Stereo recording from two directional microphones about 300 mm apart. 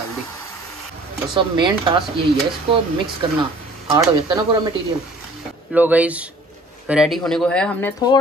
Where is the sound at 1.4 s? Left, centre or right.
Centre.